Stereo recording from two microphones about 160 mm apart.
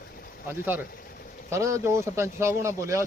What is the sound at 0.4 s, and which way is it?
Speech, 10° right (ahead or behind).